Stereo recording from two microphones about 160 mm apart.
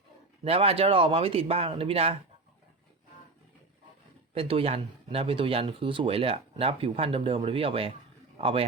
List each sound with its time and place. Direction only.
0.4 s speech: 40° right (ahead or behind)
4.4 s a man's voice: 35° right (ahead or behind)